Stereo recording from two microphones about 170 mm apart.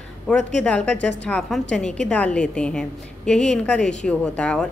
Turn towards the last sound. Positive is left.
turn(degrees=5)  # may be behind; listen again after turning